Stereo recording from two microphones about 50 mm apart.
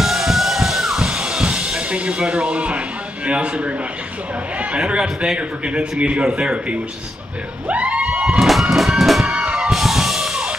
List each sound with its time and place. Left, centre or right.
0.0 s music: centre; by 2.8 s right
3.3 s a man's voice: right
5.0 s a man's voice: centre
5.7 s a man's voice: right
7.6 s music: right
8.4 s music: centre
9.3 s music: right
9.6 s music: centre